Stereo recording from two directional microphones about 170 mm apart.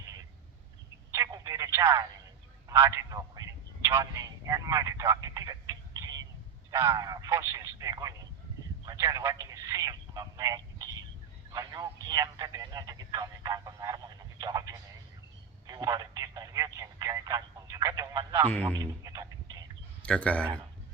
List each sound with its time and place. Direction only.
1.1 s telephone: 20° right (ahead or behind)
2.6 s a man's voice: 15° right (ahead or behind)
18.8 s music: 20° right (ahead or behind)
20.1 s speech: 5° left (ahead or behind)